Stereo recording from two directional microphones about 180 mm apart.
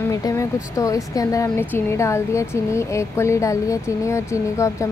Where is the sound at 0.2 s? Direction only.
15° left (ahead or behind).